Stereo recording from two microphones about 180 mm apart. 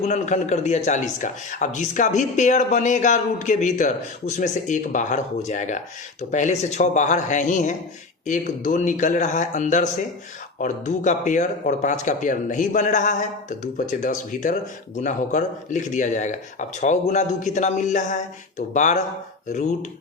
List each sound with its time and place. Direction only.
0.0 s a man's voice: 40° left (ahead or behind)